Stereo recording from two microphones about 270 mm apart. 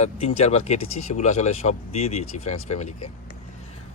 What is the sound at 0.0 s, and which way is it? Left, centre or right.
Speech, left.